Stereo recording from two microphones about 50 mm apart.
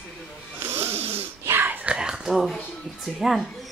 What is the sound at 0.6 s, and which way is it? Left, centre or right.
Snoring, right.